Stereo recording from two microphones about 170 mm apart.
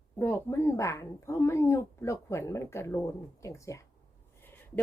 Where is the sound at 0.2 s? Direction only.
15° left (ahead or behind).